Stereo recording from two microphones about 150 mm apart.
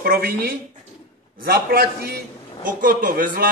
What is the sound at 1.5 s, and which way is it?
A man's voice, 90° right.